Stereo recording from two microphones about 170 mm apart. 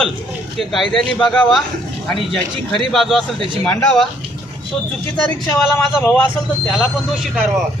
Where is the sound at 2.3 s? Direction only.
30° right (ahead or behind).